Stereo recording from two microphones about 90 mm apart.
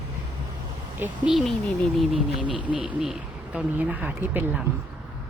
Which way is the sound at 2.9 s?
5° right (ahead or behind).